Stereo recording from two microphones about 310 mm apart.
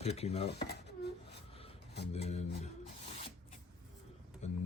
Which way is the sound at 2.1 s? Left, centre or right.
Left.